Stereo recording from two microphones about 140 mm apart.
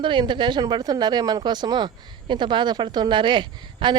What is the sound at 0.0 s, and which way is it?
Speech, 35° right (ahead or behind).